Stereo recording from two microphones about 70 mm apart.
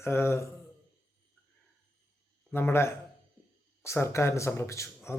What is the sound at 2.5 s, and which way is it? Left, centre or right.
Speech, left.